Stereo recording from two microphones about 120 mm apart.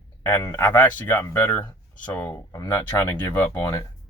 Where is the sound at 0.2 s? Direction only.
20° left (ahead or behind).